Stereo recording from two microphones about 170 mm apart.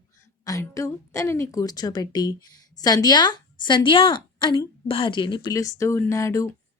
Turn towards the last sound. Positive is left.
turn(degrees=15)  # may be behind; listen again after turning